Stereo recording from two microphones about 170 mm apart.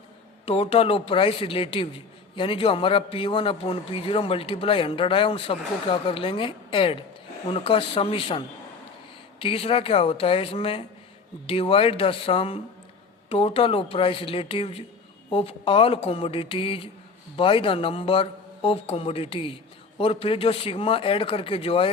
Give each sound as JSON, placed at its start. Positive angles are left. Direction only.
{"t": 0.4, "sound": "a man's voice", "side_deg": 35}